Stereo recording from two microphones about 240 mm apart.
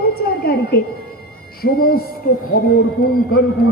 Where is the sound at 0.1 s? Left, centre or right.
Left.